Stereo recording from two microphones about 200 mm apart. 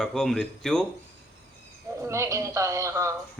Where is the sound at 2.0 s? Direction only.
15° right (ahead or behind).